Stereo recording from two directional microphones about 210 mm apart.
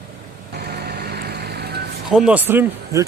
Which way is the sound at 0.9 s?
45° right (ahead or behind).